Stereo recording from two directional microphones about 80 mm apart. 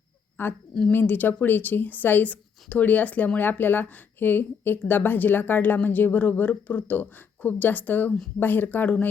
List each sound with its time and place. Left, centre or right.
0.4 s speech: left